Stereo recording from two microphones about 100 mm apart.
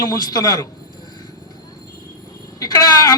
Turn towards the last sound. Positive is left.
turn(degrees=35)  # may be behind; listen again after turning